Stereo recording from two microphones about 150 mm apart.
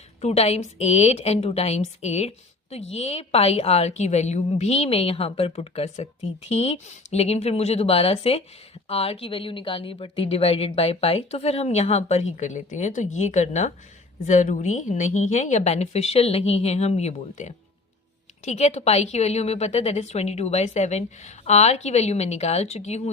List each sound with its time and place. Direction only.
0.2 s a woman's voice: 45° left (ahead or behind)